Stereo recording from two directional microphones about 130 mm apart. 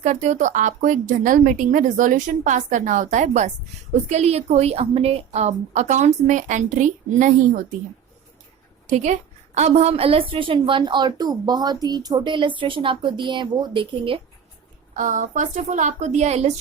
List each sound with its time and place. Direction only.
0.0 s speech: 60° right (ahead or behind)
4.1 s a woman's voice: 55° right (ahead or behind); by 7.6 s 75° right (ahead or behind)
8.9 s a woman's voice: 65° right (ahead or behind); by 14.2 s 40° right (ahead or behind)
14.9 s speech: 75° right (ahead or behind); by 16.5 s 55° right (ahead or behind)